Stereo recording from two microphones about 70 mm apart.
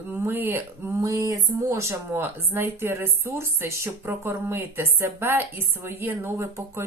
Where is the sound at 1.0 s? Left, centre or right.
Right.